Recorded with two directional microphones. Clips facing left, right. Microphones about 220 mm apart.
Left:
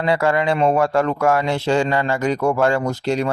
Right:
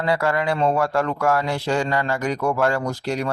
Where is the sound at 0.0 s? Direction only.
25° left (ahead or behind).